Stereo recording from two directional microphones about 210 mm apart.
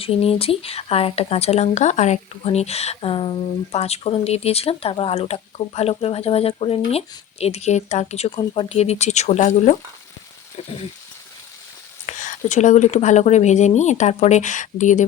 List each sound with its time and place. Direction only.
0.0 s speech: 30° left (ahead or behind)
12.0 s speech: 35° left (ahead or behind)